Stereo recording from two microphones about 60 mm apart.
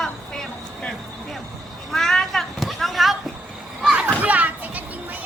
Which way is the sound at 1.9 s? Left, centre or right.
Centre.